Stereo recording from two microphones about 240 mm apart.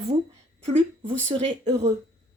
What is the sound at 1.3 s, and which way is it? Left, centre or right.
Speech, right.